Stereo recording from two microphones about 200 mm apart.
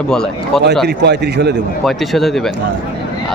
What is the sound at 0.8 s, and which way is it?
Speech, 55° right (ahead or behind).